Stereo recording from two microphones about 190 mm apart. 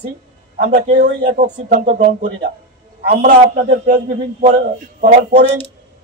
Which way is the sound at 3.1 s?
45° right (ahead or behind).